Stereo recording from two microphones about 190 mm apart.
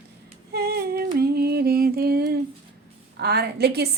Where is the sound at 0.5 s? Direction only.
55° right (ahead or behind).